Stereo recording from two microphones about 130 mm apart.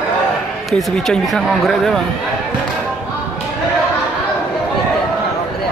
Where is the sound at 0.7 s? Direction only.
5° left (ahead or behind).